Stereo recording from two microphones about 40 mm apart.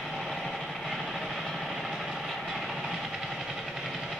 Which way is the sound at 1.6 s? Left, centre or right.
Centre.